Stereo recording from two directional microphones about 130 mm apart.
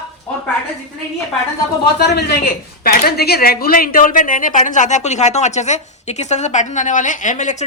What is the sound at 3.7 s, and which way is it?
Speech, 90° left.